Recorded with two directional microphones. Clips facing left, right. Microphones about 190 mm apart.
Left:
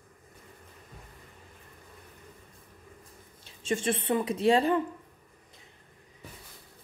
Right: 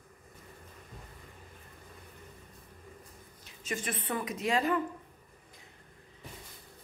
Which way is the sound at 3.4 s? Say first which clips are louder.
Left 8 dB; 30° left (ahead or behind).